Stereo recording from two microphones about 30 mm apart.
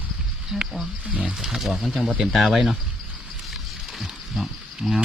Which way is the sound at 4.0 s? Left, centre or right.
Centre.